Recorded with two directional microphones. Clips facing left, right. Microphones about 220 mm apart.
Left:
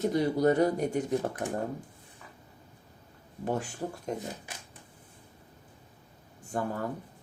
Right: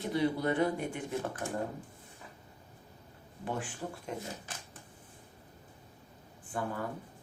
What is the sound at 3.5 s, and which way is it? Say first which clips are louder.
Speech: left 5 dB; 40° left (ahead or behind).